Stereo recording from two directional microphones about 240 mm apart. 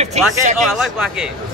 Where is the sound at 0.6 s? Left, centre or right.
Centre.